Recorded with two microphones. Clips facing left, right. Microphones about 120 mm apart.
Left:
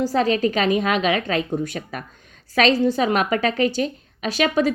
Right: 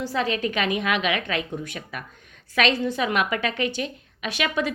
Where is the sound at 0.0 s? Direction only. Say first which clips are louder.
Left 6 dB; 40° left (ahead or behind).